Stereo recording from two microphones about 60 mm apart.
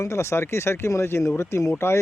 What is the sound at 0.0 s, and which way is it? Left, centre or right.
Speech, left.